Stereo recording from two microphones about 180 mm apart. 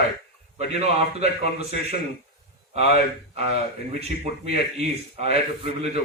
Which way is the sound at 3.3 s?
35° right (ahead or behind).